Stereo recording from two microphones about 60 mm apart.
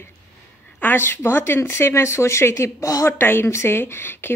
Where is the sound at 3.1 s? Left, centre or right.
Left.